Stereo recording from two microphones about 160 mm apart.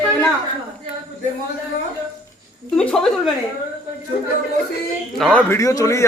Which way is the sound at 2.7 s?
5° left (ahead or behind).